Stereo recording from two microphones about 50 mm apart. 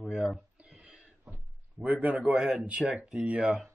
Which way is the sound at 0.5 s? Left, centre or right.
Right.